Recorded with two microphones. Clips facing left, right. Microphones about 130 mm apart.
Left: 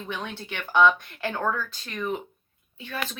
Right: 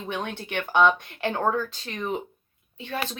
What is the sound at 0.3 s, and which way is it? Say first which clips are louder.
Speech: right 5 dB; 55° right (ahead or behind).